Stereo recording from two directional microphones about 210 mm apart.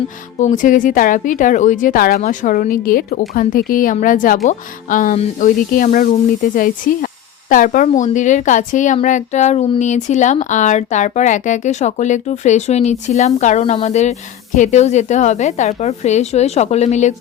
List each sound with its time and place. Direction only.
0.3 s a woman's voice: 35° left (ahead or behind)